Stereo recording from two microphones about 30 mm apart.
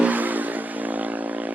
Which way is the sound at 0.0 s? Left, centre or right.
Right.